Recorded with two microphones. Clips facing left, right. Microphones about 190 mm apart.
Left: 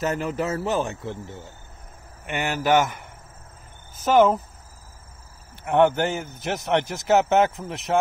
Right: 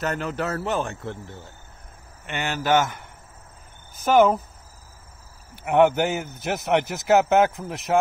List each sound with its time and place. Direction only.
0.1 s a man's voice: 10° left (ahead or behind)
2.2 s a man's voice: 5° left (ahead or behind)
4.0 s a man's voice: centre (ahead or behind)
5.6 s a man's voice: 10° right (ahead or behind)